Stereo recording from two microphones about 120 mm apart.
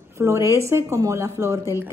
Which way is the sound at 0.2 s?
25° right (ahead or behind).